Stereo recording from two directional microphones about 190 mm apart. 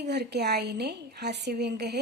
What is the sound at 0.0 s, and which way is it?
A woman's voice, 60° right (ahead or behind).